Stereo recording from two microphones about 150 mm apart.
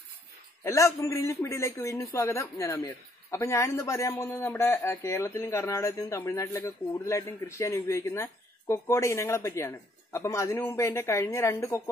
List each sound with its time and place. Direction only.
0.7 s a man's voice: 20° left (ahead or behind)